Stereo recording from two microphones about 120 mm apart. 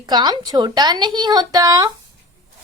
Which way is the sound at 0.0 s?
35° right (ahead or behind).